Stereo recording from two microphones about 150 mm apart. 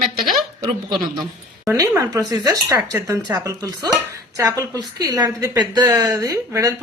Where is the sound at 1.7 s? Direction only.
20° right (ahead or behind).